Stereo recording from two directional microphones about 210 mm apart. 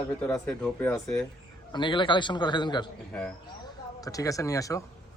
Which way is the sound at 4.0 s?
15° left (ahead or behind).